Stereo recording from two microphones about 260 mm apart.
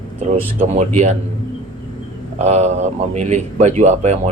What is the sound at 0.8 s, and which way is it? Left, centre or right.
Speech, right.